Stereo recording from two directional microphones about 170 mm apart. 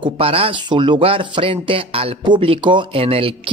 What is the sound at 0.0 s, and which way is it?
Speech, 35° right (ahead or behind).